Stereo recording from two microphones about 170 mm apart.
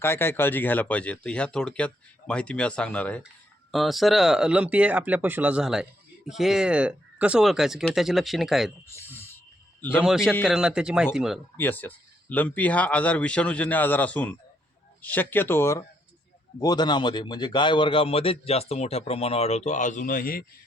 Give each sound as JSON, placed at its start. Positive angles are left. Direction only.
{"t": 0.0, "sound": "speech", "side_deg": 15}
{"t": 8.9, "sound": "a sound", "side_deg": 15}
{"t": 10.0, "sound": "speech", "side_deg": -5}
{"t": 11.5, "sound": "a man's voice", "side_deg": 10}